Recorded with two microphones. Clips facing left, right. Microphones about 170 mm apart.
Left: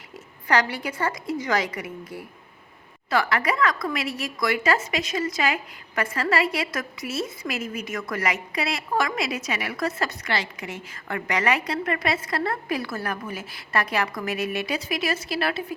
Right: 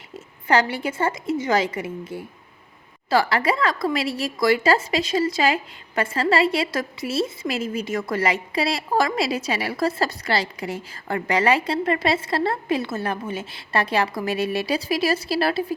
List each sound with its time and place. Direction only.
0.1 s a woman's voice: 25° right (ahead or behind)